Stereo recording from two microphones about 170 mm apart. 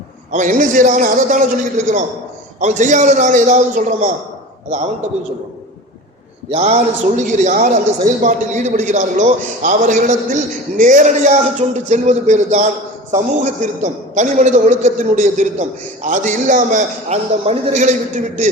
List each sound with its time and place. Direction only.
0.3 s a man's voice: 50° right (ahead or behind)
2.6 s a man's voice: 45° right (ahead or behind)
6.5 s a man's voice: 40° right (ahead or behind)